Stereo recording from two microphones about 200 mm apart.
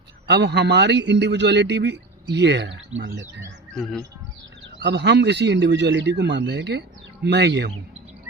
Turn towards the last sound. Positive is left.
turn(degrees=-60)  # may be behind; listen again after turning